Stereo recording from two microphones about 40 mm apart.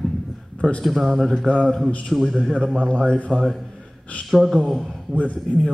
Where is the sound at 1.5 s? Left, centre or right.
Left.